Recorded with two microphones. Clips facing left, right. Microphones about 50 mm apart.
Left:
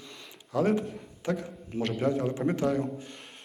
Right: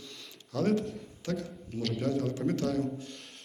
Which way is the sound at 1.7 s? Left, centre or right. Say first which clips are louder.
Left 4 dB; left.